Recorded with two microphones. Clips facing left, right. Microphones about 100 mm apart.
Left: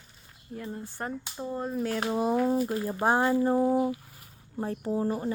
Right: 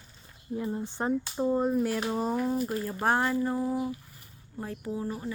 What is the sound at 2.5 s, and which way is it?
Speech, 15° left (ahead or behind).